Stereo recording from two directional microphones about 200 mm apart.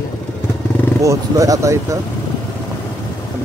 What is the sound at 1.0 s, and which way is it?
Speech, 15° right (ahead or behind).